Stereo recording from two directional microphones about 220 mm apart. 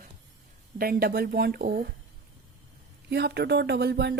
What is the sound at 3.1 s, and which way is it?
Speech, 50° right (ahead or behind).